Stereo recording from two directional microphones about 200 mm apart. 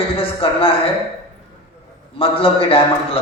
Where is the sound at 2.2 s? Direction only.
30° left (ahead or behind).